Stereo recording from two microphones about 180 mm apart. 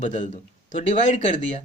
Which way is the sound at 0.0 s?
45° left (ahead or behind).